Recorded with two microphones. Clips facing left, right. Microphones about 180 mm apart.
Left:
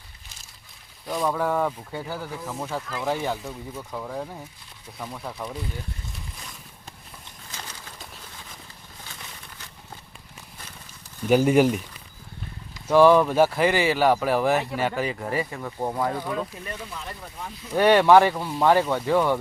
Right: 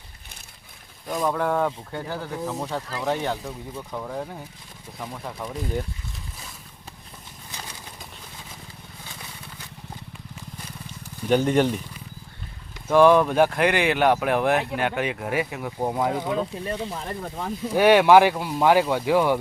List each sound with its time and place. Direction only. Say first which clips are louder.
1.0 s speech: right 1 dB; centre (ahead or behind)
11.3 s speech: left 2 dB; 10° left (ahead or behind)
13.1 s speech: even; 5° left (ahead or behind); by 17.0 s 30° right (ahead or behind)
17.0 s speech: right 6 dB; 45° right (ahead or behind)
17.7 s speech: right 1 dB; 5° right (ahead or behind)